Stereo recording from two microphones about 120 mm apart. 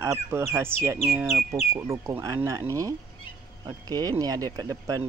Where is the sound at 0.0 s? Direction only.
20° right (ahead or behind).